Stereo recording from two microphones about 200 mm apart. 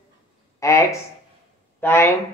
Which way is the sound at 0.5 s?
15° left (ahead or behind).